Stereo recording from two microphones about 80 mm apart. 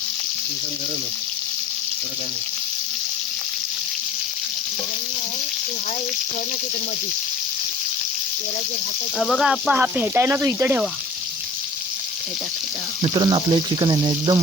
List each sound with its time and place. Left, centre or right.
9.1 s speech: centre
9.4 s speech: centre
9.7 s speech: right
13.0 s speech: right